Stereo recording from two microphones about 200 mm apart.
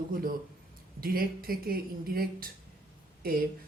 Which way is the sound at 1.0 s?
45° right (ahead or behind).